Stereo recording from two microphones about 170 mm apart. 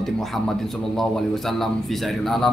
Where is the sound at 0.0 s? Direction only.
Centre (ahead or behind).